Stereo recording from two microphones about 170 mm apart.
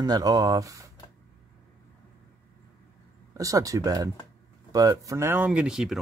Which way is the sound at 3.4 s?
20° right (ahead or behind).